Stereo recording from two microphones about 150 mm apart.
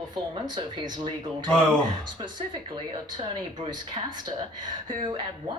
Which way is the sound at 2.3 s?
30° right (ahead or behind).